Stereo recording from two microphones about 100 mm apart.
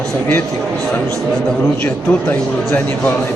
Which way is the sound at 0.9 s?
5° left (ahead or behind).